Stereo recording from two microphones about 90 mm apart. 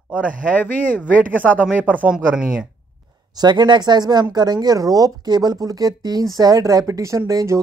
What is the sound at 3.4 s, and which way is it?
Speech, 50° right (ahead or behind).